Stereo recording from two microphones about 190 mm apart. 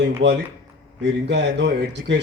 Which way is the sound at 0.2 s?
65° right (ahead or behind).